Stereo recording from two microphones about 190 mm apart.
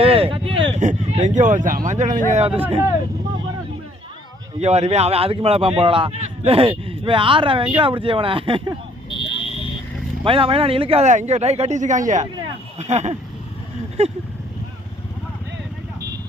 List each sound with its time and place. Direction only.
0.0 s a sound: 30° right (ahead or behind)
0.7 s speech: 35° right (ahead or behind)
4.6 s a man's voice: 35° right (ahead or behind)
9.0 s fire alarm: 25° left (ahead or behind)
10.2 s speech: 30° right (ahead or behind)